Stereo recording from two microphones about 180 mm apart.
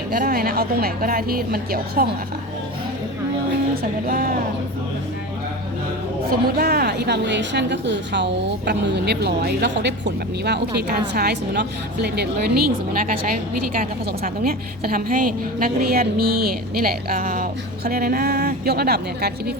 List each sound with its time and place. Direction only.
0.1 s a woman's voice: 55° right (ahead or behind)
4.0 s speech: 50° right (ahead or behind)
6.6 s a woman's voice: 60° right (ahead or behind)
14.4 s a woman's voice: 55° right (ahead or behind)